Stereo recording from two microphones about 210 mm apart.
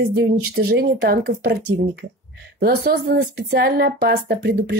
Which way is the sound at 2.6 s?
45° right (ahead or behind).